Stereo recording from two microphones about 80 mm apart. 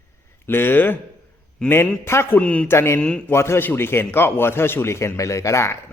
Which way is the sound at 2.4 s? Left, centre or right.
Centre.